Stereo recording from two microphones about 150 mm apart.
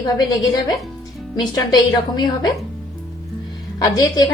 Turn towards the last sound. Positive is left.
turn(degrees=25)  # may be behind; listen again after turning